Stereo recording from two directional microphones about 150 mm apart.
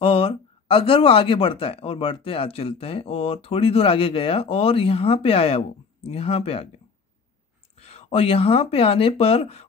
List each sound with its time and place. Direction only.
0.0 s speech: 40° left (ahead or behind)
7.7 s speech: 40° left (ahead or behind)